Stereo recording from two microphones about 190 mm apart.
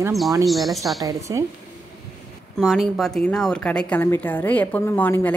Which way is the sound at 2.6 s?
Centre (ahead or behind).